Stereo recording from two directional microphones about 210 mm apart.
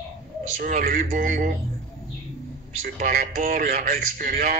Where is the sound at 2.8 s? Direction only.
45° right (ahead or behind).